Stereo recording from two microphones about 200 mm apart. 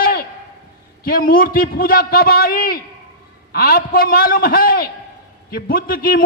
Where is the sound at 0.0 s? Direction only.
50° left (ahead or behind).